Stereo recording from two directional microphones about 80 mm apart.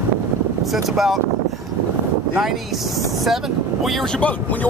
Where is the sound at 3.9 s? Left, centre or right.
Centre.